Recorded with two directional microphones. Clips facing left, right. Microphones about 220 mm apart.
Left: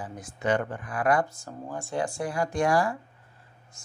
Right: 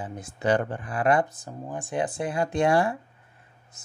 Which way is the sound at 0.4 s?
35° right (ahead or behind).